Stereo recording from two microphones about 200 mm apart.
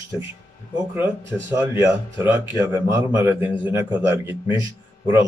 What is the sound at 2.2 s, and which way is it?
Speech, 10° right (ahead or behind).